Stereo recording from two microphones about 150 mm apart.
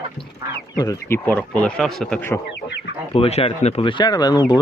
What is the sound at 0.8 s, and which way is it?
Speech, 20° left (ahead or behind).